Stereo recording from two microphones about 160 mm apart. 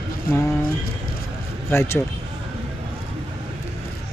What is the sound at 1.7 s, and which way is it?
Speech, 15° left (ahead or behind).